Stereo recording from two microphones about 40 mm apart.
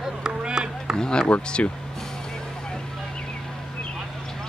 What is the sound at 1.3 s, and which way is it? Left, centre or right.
Speech, left.